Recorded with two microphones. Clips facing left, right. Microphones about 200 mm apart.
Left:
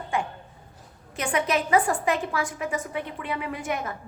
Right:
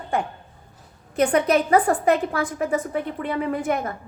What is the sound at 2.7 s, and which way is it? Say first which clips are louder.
A woman's voice: right 6 dB; 50° right (ahead or behind).